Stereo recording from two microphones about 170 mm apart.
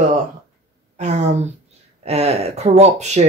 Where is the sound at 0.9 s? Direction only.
45° right (ahead or behind).